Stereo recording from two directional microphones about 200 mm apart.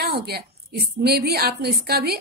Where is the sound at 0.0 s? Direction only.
55° right (ahead or behind).